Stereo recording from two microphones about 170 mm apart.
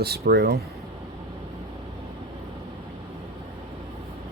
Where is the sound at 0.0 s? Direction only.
70° right (ahead or behind).